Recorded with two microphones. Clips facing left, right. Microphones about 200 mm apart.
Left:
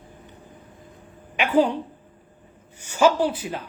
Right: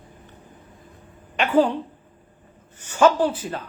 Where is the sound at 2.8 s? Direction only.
10° left (ahead or behind).